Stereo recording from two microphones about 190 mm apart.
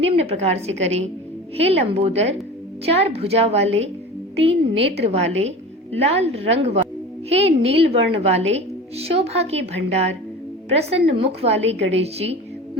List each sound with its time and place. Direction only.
0.0 s a woman's voice: 30° right (ahead or behind)